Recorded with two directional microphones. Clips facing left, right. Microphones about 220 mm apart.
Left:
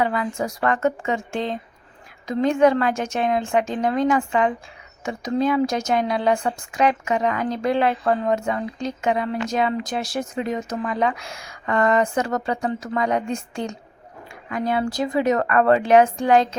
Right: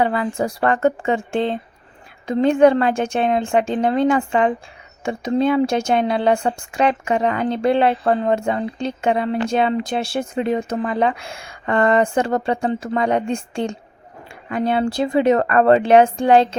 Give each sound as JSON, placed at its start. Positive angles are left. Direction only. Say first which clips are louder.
{"t": 0.0, "sound": "speech", "louder": "right 3 dB", "side_deg": -30}